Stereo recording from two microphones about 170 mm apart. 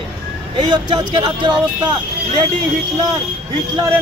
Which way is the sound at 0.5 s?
30° right (ahead or behind).